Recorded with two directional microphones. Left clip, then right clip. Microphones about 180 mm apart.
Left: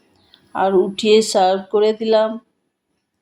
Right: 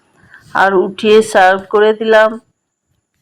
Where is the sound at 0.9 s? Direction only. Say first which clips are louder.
Right 5 dB; 5° left (ahead or behind).